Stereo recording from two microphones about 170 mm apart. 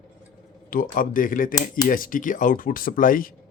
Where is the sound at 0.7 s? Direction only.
55° left (ahead or behind).